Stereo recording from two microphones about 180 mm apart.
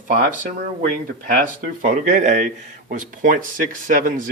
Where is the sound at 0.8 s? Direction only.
50° right (ahead or behind).